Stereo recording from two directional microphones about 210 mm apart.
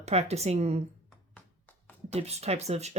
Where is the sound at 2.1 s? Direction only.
30° right (ahead or behind).